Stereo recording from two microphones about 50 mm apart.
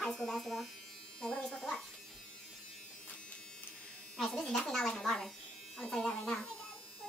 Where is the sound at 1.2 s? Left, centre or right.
Centre.